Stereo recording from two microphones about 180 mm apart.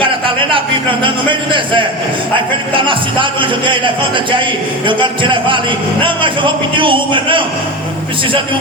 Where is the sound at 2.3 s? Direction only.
30° right (ahead or behind).